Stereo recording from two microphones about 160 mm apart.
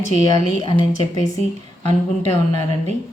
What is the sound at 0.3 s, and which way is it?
Speech, 25° left (ahead or behind).